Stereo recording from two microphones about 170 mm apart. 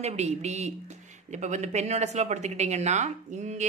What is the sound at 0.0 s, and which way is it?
Speech, 40° right (ahead or behind).